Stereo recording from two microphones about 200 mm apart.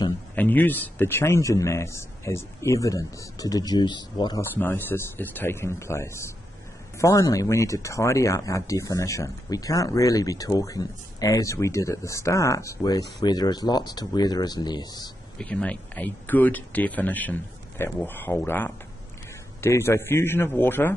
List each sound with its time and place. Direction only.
0.4 s speech: 10° left (ahead or behind)
15.3 s speech: 5° left (ahead or behind)